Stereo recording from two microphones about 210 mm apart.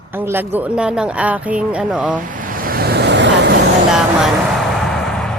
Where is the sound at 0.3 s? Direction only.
10° right (ahead or behind).